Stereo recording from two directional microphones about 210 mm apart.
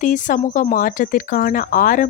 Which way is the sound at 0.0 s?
40° left (ahead or behind).